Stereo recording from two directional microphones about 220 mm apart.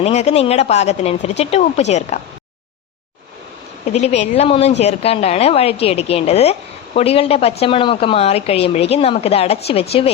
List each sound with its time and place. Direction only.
0.0 s a woman's voice: 30° left (ahead or behind)
3.9 s a woman's voice: 30° left (ahead or behind)